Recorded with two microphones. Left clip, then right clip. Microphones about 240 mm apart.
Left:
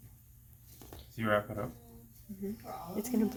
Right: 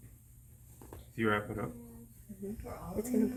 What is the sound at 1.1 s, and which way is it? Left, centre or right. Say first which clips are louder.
Speech: left 1 dB; left.